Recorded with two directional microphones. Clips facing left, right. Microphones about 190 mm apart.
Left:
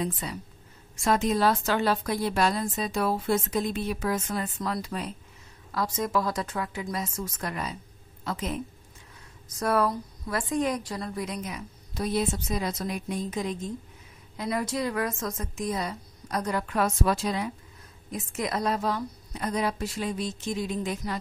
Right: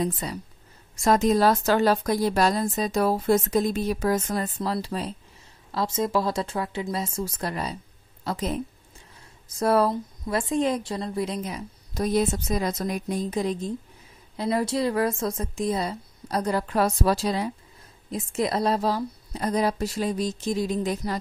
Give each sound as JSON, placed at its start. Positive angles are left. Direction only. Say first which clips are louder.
{"t": 0.0, "sound": "a woman's voice", "louder": "right 4 dB", "side_deg": -40}
{"t": 12.0, "sound": "a woman's voice", "louder": "right 4 dB", "side_deg": -45}